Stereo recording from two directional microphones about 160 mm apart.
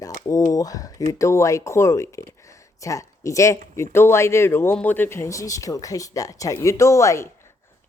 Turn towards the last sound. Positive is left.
turn(degrees=20)  # may be behind; listen again after turning